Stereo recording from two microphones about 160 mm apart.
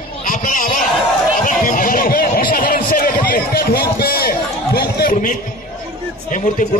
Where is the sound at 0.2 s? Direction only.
60° left (ahead or behind).